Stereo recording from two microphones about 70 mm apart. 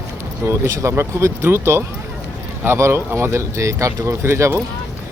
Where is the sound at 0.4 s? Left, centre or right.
Right.